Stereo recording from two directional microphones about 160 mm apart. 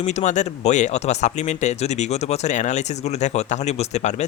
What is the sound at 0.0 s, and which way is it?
Speech, 45° left (ahead or behind).